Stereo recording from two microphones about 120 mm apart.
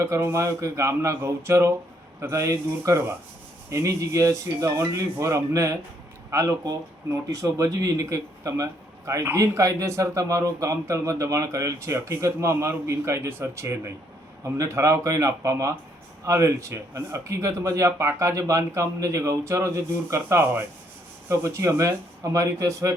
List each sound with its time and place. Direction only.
0.0 s speech: 20° right (ahead or behind)